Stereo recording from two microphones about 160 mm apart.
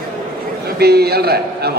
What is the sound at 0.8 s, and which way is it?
Speech, 85° right.